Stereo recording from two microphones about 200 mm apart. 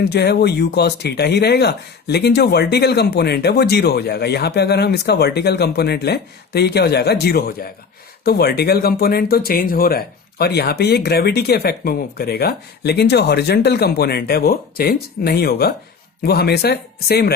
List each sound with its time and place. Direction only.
0.0 s speech: 55° left (ahead or behind)